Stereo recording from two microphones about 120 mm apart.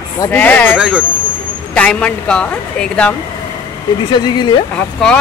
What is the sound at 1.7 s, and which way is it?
Speech, 10° left (ahead or behind).